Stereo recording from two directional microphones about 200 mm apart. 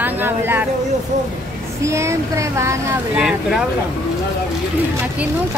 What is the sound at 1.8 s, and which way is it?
Speech, 15° right (ahead or behind).